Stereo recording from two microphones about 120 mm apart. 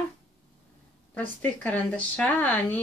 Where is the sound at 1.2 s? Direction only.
15° left (ahead or behind).